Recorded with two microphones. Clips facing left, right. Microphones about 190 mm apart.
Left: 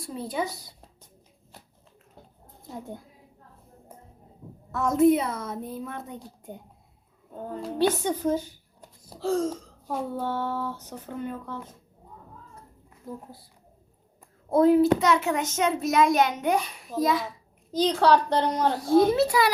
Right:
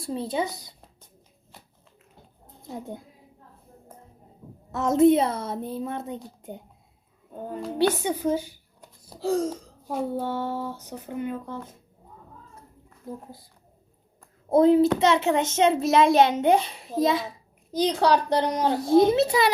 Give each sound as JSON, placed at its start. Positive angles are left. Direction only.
{"t": 0.0, "sound": "a child's voice", "side_deg": -25}
{"t": 2.6, "sound": "speech", "side_deg": -20}
{"t": 4.7, "sound": "a child's voice", "side_deg": -25}
{"t": 8.0, "sound": "a sound", "side_deg": -10}
{"t": 14.5, "sound": "a child's voice", "side_deg": -20}